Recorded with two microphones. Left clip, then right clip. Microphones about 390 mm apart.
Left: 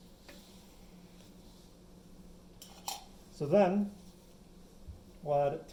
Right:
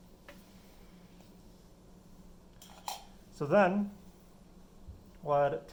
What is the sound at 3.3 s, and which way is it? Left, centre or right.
Speech, centre.